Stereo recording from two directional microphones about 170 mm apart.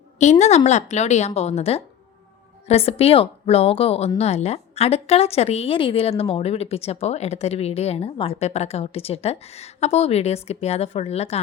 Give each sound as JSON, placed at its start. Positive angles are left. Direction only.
{"t": 0.2, "sound": "a woman's voice", "side_deg": 40}